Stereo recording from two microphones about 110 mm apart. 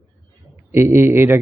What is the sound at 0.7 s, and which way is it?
Speech, 20° right (ahead or behind).